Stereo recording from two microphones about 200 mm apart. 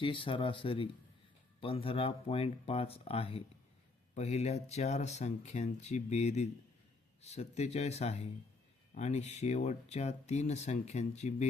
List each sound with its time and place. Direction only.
0.0 s speech: 25° left (ahead or behind)